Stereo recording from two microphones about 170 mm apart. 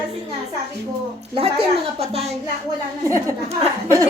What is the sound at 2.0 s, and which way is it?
Speech, 40° right (ahead or behind).